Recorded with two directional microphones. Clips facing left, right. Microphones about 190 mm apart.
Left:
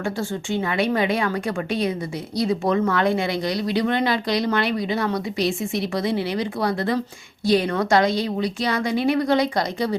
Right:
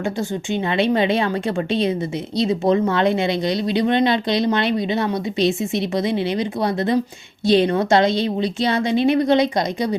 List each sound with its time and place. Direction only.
0.0 s speech: 20° right (ahead or behind)